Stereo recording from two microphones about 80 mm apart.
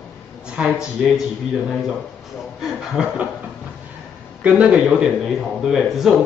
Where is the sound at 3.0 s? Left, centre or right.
Centre.